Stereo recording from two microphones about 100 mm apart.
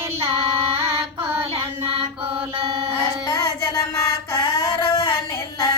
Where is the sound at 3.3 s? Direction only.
30° left (ahead or behind).